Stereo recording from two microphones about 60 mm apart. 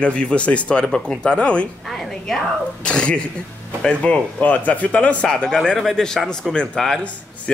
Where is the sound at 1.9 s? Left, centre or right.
Centre.